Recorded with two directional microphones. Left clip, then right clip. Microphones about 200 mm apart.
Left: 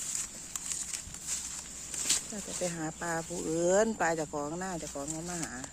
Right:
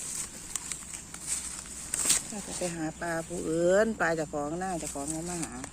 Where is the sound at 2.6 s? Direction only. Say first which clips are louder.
Right 2 dB; 30° left (ahead or behind).